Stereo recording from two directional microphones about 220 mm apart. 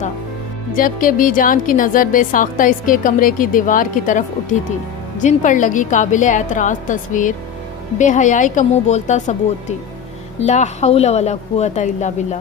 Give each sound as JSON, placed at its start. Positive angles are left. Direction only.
{"t": 0.7, "sound": "a woman's voice", "side_deg": 35}